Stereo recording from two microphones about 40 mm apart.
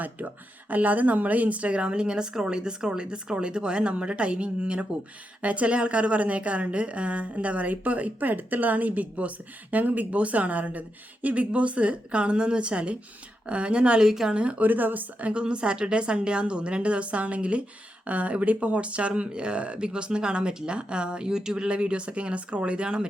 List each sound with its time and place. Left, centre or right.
0.7 s a woman's voice: right
14.0 s speech: centre
14.6 s speech: right
15.2 s speech: right